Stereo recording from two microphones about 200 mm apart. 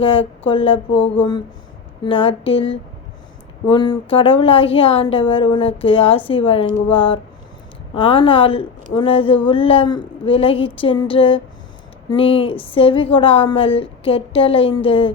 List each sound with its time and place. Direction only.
0.0 s a woman's voice: 25° left (ahead or behind)
0.9 s speech: 65° left (ahead or behind)
2.0 s a woman's voice: 25° left (ahead or behind)